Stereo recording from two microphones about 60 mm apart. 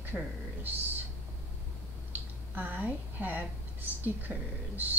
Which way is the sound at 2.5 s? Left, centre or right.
Right.